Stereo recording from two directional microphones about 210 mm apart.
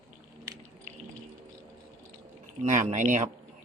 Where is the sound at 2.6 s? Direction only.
35° right (ahead or behind).